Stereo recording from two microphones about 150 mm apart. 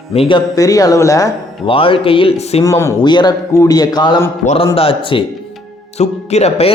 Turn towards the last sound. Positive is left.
turn(degrees=45)  # may be behind; listen again after turning